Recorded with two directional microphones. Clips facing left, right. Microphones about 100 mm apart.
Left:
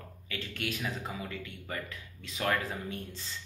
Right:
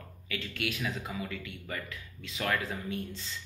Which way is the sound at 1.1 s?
30° left (ahead or behind).